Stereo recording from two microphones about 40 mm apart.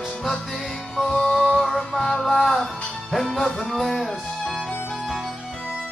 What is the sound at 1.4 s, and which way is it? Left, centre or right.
Music, centre.